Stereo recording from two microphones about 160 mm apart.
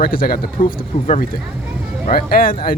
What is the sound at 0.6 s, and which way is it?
Speech, 30° left (ahead or behind).